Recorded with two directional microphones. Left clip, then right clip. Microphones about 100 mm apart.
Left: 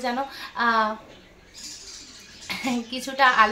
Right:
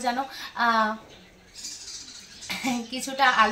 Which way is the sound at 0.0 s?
30° left (ahead or behind).